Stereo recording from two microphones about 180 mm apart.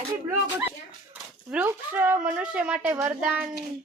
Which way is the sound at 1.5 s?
10° right (ahead or behind).